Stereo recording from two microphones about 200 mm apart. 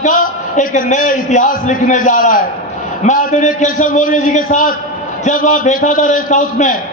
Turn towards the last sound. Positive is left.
turn(degrees=40)  # may be behind; listen again after turning